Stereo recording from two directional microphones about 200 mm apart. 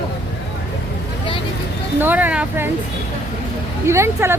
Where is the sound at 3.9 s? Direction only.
15° right (ahead or behind).